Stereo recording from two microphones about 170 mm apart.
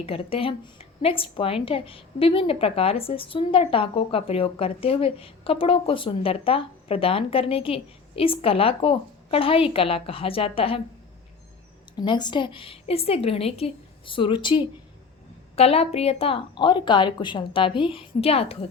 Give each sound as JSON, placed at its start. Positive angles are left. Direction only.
{"t": 0.0, "sound": "a woman's voice", "side_deg": 35}
{"t": 11.9, "sound": "a woman's voice", "side_deg": 25}